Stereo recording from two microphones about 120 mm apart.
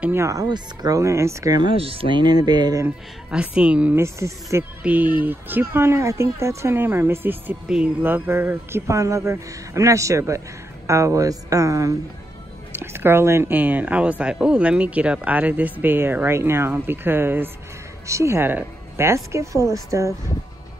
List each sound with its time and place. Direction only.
0.0 s speech: 20° right (ahead or behind)
1.8 s music: 50° right (ahead or behind); by 2.8 s 35° right (ahead or behind)
3.3 s speech: 10° right (ahead or behind)
3.9 s speech: 25° right (ahead or behind)
7.6 s speech: 5° right (ahead or behind)
8.0 s speech: 20° right (ahead or behind)